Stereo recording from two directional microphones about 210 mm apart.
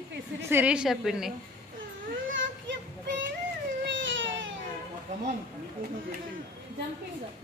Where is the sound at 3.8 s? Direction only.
60° right (ahead or behind).